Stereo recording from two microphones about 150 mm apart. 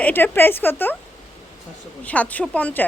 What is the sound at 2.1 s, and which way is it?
Speech, 10° left (ahead or behind).